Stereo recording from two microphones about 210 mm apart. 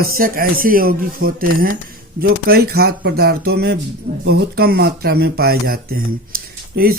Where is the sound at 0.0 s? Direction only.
45° right (ahead or behind).